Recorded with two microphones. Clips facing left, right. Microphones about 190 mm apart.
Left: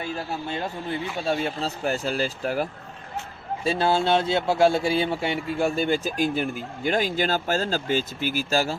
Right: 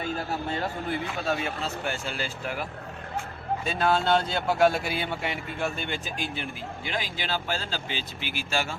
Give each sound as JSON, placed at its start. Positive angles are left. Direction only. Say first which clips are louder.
{"t": 1.2, "sound": "speech", "louder": "left 6 dB", "side_deg": 30}